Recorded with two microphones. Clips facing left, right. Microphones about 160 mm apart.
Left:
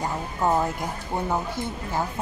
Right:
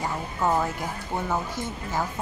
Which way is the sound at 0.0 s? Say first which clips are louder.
Left 1 dB; 15° left (ahead or behind).